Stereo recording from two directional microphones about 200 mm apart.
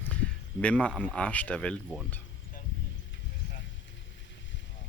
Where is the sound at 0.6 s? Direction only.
5° left (ahead or behind).